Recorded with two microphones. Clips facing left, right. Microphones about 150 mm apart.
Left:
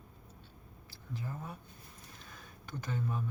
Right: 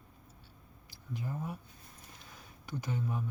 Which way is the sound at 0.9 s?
15° right (ahead or behind).